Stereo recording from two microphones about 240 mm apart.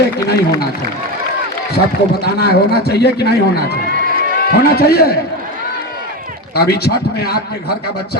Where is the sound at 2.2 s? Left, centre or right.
Left.